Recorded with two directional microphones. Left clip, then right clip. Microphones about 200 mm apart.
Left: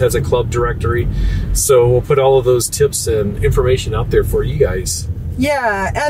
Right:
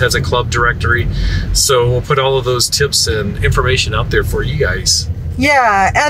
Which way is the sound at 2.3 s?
25° left (ahead or behind).